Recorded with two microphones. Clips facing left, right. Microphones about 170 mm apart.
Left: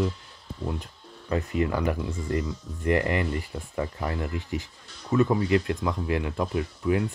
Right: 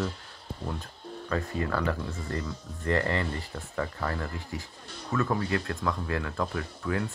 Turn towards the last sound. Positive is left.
turn(degrees=20)  # may be behind; listen again after turning